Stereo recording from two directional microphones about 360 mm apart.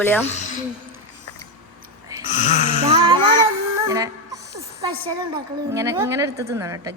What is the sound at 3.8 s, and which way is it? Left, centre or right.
Music, centre.